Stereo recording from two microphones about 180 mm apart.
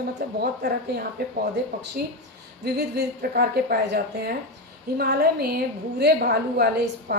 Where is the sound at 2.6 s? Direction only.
65° right (ahead or behind).